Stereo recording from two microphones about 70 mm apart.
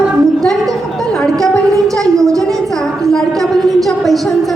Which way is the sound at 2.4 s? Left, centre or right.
Centre.